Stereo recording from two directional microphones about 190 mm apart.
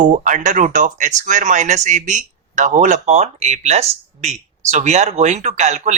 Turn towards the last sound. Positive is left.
turn(degrees=-35)  # may be behind; listen again after turning